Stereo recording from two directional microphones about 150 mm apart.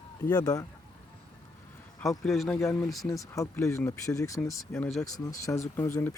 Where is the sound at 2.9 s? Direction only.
Centre (ahead or behind).